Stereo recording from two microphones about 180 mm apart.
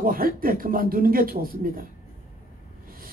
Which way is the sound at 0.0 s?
55° right (ahead or behind).